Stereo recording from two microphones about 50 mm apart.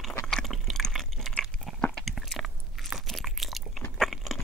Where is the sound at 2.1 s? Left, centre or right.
Centre.